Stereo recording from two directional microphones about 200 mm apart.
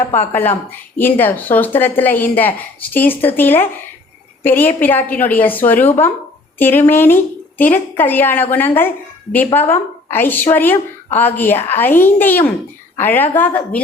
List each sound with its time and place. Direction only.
0.0 s a woman's voice: 10° left (ahead or behind)